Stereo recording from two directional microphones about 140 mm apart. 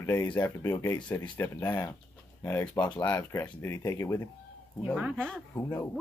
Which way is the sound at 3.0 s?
20° left (ahead or behind).